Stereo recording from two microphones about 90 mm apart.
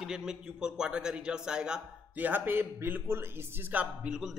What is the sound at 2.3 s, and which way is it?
Speech, 20° right (ahead or behind).